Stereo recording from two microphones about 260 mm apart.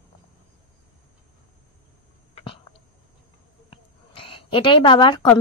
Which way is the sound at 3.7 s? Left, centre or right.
Left.